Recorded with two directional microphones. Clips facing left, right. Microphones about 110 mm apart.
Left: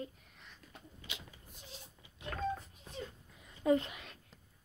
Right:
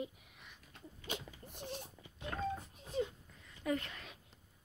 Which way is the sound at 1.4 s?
60° right (ahead or behind).